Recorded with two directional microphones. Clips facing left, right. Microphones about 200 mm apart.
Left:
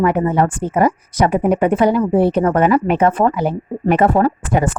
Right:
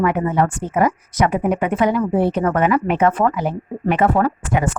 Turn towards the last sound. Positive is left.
turn(degrees=35)  # may be behind; listen again after turning